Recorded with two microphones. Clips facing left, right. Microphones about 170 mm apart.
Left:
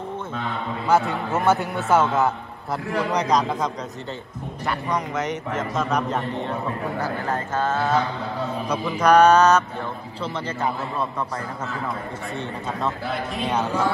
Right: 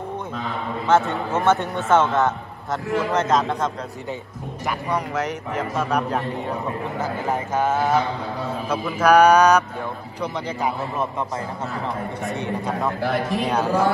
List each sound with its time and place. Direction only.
0.8 s a man's voice: centre (ahead or behind)
7.0 s a man's voice: 15° right (ahead or behind)
8.6 s a man's voice: 5° right (ahead or behind)
13.3 s a man's voice: centre (ahead or behind)